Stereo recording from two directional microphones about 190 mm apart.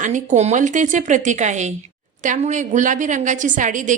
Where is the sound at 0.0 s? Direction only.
40° right (ahead or behind).